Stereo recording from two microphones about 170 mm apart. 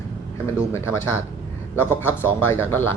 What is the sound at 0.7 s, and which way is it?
Speech, 15° left (ahead or behind).